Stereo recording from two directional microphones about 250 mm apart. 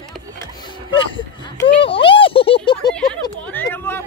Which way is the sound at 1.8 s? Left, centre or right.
Left.